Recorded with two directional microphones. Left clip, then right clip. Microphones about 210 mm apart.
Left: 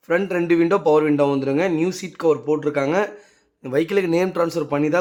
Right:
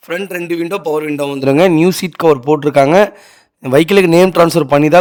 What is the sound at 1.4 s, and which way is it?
A man's voice, 50° right (ahead or behind).